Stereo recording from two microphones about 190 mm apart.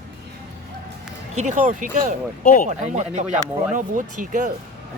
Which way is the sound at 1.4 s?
40° right (ahead or behind).